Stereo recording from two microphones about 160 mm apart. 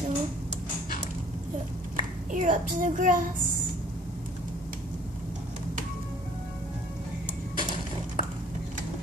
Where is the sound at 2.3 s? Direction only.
55° right (ahead or behind).